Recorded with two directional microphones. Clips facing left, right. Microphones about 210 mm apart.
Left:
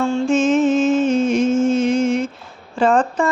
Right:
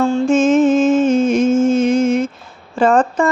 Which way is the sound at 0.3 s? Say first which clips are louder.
Right 3 dB; 50° right (ahead or behind).